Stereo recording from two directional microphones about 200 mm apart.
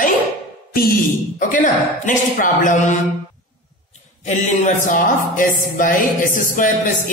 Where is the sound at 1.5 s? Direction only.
40° left (ahead or behind).